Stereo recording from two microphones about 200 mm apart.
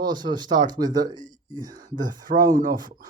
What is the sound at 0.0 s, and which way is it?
Speech, 20° right (ahead or behind).